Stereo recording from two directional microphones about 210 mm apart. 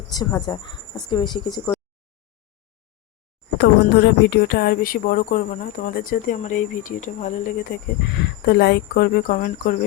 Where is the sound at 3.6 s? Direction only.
55° left (ahead or behind); by 7.7 s 40° left (ahead or behind).